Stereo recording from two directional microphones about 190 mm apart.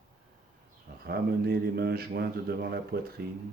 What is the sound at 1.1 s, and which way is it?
A man's voice, 55° right (ahead or behind).